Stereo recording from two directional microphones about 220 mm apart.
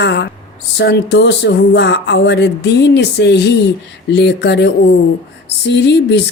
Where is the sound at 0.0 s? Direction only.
50° left (ahead or behind).